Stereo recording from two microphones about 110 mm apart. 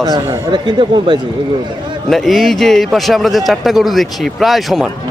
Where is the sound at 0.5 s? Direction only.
45° right (ahead or behind).